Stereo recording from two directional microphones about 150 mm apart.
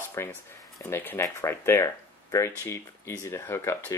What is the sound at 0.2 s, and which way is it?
Speech, 20° left (ahead or behind).